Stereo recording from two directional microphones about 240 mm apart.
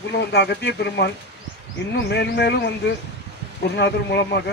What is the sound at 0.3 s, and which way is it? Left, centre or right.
Speech, left.